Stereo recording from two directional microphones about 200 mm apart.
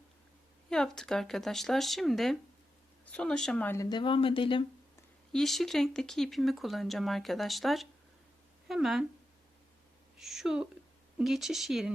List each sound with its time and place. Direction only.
0.7 s speech: 5° left (ahead or behind); by 4.6 s 25° left (ahead or behind)
5.3 s speech: centre (ahead or behind)
10.2 s speech: centre (ahead or behind)